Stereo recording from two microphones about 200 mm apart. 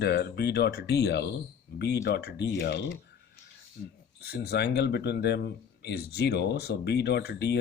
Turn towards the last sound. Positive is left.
turn(degrees=55)  # may be behind; listen again after turning